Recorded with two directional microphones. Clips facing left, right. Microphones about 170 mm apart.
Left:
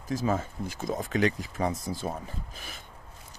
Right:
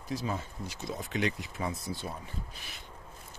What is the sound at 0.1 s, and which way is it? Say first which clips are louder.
Speech: left 6 dB; 45° left (ahead or behind).